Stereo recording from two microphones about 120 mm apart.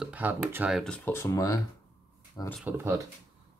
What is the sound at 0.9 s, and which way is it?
Speech, 20° left (ahead or behind).